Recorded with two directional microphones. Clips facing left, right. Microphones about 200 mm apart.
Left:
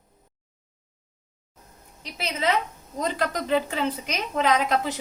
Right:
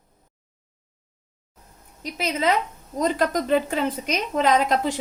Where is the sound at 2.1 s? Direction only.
40° right (ahead or behind).